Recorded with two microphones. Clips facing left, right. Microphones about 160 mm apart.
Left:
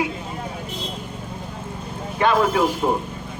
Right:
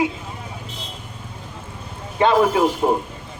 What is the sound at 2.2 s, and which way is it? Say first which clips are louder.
Speech: right 2 dB; 25° right (ahead or behind).